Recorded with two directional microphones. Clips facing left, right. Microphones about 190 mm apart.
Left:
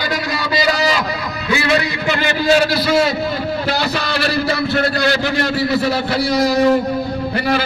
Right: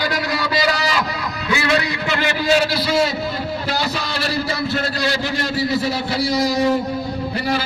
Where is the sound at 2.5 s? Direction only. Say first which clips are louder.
Left 4 dB; 50° left (ahead or behind); by 7.7 s 65° left (ahead or behind).